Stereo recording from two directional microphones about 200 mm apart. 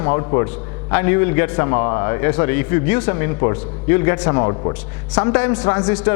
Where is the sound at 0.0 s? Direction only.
15° left (ahead or behind).